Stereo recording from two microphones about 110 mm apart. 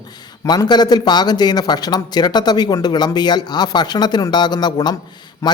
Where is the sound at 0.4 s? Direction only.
40° left (ahead or behind).